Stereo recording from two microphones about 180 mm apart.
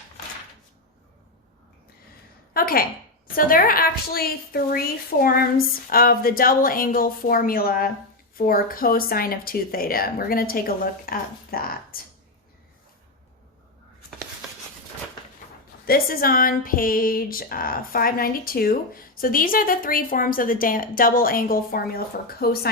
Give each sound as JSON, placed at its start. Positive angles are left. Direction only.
{"t": 2.5, "sound": "a woman's voice", "side_deg": 55}
{"t": 15.9, "sound": "speech", "side_deg": 55}